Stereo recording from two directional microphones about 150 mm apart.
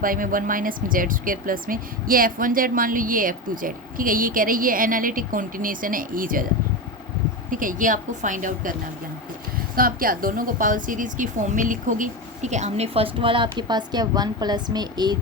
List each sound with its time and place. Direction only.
0.0 s speech: 65° right (ahead or behind)
7.5 s a woman's voice: 65° right (ahead or behind)
9.7 s a woman's voice: 75° right (ahead or behind); by 15.2 s 30° right (ahead or behind)